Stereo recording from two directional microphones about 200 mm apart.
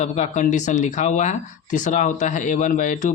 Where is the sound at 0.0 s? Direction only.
35° left (ahead or behind).